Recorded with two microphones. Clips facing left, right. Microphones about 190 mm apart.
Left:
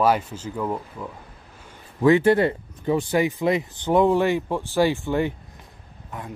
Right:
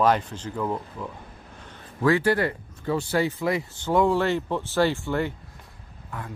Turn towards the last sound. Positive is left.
turn(degrees=20)  # may be behind; listen again after turning